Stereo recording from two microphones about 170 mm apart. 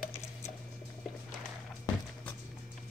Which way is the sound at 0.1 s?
15° left (ahead or behind).